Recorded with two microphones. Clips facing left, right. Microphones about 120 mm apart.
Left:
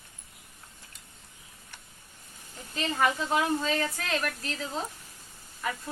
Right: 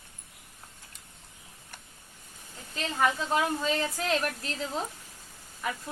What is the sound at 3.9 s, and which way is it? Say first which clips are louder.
Speech: right 3 dB; 20° right (ahead or behind).